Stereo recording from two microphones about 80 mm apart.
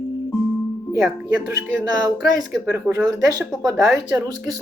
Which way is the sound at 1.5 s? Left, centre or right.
Right.